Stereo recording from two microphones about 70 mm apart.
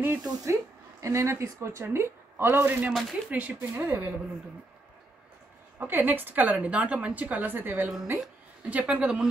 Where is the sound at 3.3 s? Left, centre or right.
Right.